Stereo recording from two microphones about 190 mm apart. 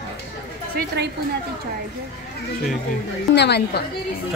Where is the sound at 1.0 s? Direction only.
60° right (ahead or behind).